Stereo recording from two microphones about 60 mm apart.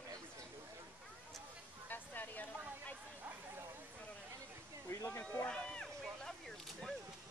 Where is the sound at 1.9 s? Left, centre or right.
Left.